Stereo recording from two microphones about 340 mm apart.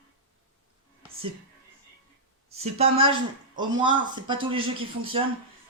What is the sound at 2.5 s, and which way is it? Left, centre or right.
A man's voice, centre.